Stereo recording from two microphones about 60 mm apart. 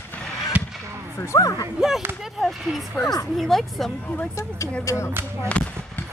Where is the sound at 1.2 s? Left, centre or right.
Left.